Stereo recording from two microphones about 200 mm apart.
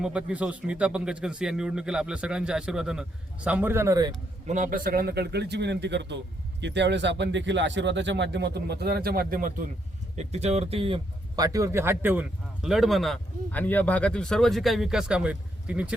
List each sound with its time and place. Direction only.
0.0 s speech: 5° right (ahead or behind)
4.4 s speech: 40° right (ahead or behind)
10.2 s speech: 30° right (ahead or behind); by 16.0 s 5° right (ahead or behind)